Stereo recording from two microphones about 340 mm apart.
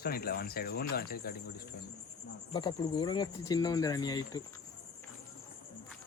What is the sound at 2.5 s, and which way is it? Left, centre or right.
Speech, centre.